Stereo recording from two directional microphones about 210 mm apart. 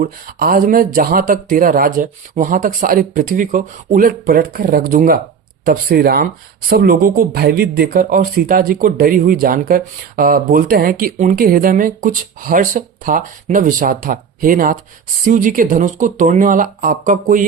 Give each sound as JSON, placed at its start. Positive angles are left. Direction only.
{"t": 0.0, "sound": "speech", "side_deg": -40}